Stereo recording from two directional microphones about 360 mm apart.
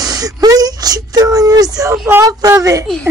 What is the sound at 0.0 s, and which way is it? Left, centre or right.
Whimper, centre.